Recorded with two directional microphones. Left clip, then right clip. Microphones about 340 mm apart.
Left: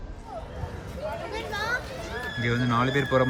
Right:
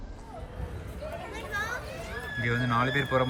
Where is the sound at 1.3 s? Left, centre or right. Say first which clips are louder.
Left 2 dB; left.